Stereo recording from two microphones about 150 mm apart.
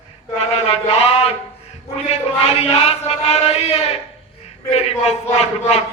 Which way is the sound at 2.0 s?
40° left (ahead or behind).